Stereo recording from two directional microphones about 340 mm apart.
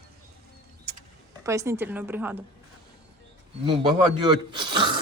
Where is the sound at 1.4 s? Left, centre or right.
Centre.